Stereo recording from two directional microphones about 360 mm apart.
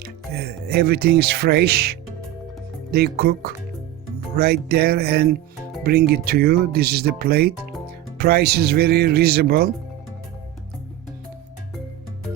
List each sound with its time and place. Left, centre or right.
0.0 s speech: right